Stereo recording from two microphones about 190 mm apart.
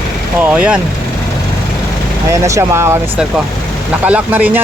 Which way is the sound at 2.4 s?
15° right (ahead or behind).